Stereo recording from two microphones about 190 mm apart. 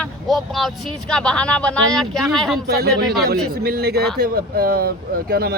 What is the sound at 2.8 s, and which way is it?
Speech, 55° right (ahead or behind).